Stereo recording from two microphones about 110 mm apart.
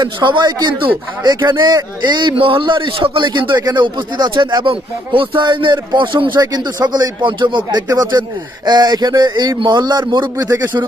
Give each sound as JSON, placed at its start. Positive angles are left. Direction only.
{"t": 0.0, "sound": "a man's voice", "side_deg": -45}
{"t": 10.3, "sound": "a man's voice", "side_deg": -30}